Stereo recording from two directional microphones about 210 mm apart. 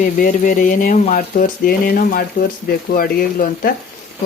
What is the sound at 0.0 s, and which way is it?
Speech, 35° left (ahead or behind).